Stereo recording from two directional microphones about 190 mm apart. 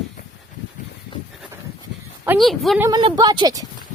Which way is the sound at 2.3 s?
Centre (ahead or behind).